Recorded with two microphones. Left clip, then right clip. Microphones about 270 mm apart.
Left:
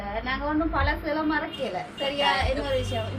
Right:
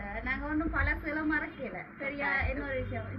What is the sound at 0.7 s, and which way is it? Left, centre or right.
Speech, left.